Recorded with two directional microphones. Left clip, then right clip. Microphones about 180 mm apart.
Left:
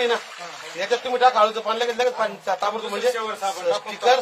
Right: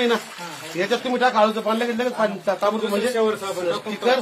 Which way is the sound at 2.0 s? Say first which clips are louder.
Even; 50° left (ahead or behind).